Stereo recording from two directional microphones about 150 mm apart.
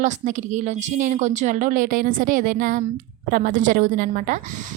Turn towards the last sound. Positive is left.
turn(degrees=-60)  # may be behind; listen again after turning